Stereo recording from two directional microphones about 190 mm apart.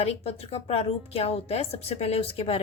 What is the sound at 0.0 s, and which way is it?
A woman's voice, 30° left (ahead or behind).